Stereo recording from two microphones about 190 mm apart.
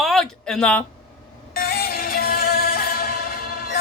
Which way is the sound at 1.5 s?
50° left (ahead or behind).